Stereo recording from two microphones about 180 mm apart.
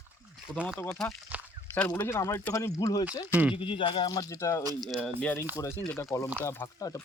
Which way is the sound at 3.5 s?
30° left (ahead or behind).